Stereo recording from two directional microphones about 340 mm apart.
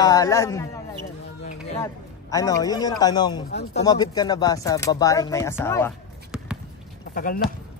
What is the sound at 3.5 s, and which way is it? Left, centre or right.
Speech, left.